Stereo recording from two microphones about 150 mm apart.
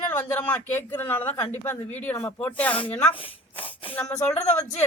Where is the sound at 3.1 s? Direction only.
35° left (ahead or behind).